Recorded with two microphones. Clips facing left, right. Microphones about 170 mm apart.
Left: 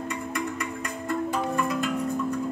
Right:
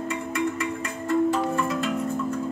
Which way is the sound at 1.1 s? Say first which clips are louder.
Right 5 dB; centre (ahead or behind).